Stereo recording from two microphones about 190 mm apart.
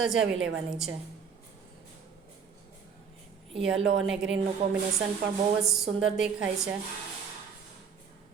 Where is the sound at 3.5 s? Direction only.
Centre (ahead or behind).